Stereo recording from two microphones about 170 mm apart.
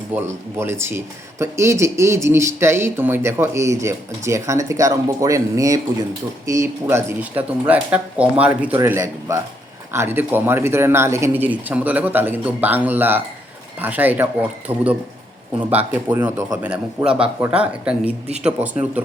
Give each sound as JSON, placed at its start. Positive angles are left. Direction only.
{"t": 0.1, "sound": "speech", "side_deg": -10}
{"t": 15.9, "sound": "a man's voice", "side_deg": -10}